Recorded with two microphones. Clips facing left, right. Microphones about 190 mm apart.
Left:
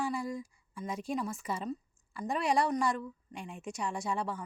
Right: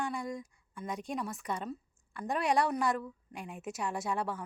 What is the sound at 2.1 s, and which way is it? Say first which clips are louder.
A woman's voice: even; centre (ahead or behind).